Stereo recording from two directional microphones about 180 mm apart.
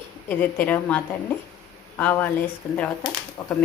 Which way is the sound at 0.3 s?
10° left (ahead or behind).